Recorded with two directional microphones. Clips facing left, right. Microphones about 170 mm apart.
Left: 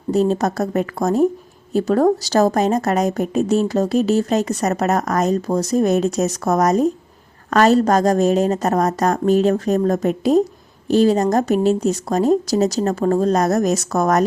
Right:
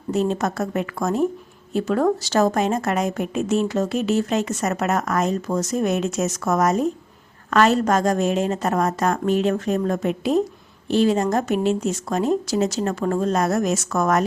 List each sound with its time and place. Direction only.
0.1 s a woman's voice: 35° left (ahead or behind)